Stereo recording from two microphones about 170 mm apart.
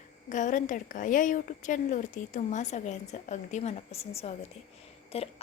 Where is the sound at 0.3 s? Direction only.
50° left (ahead or behind).